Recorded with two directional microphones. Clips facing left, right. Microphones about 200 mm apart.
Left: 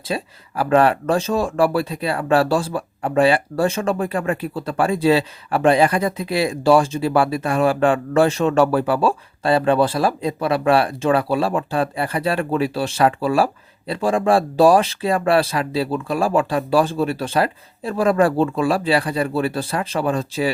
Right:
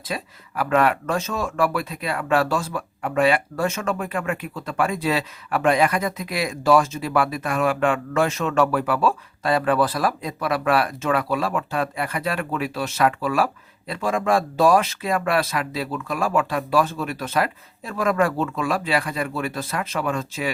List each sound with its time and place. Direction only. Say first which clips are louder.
0.0 s speech: left 5 dB; 30° left (ahead or behind)